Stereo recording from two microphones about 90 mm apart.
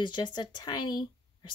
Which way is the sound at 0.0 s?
55° left (ahead or behind).